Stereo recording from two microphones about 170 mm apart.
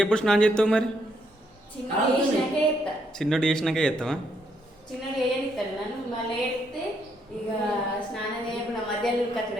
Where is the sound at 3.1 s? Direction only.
Centre (ahead or behind).